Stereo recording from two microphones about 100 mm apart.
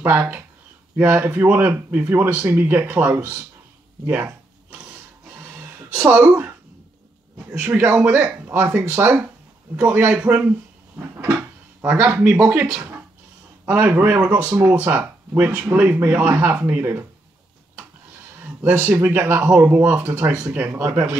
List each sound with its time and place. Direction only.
0.0 s speech: 20° right (ahead or behind)
4.1 s a sound: 15° right (ahead or behind)
6.0 s speech: 15° right (ahead or behind)
7.6 s speech: 20° right (ahead or behind)
11.8 s speech: 20° right (ahead or behind)
13.7 s speech: 15° right (ahead or behind)
18.4 s a sound: 20° right (ahead or behind)
19.0 s speech: 25° right (ahead or behind)